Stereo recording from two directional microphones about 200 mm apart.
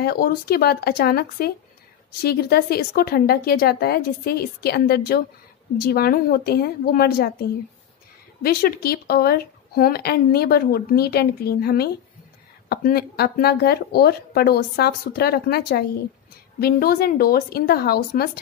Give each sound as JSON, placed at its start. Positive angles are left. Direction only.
{"t": 0.0, "sound": "a woman's voice", "side_deg": 50}
{"t": 8.4, "sound": "a woman's voice", "side_deg": 50}